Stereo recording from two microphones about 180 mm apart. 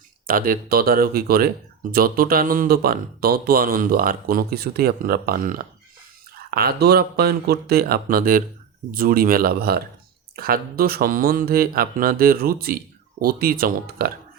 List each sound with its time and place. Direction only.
0.3 s speech: 50° right (ahead or behind)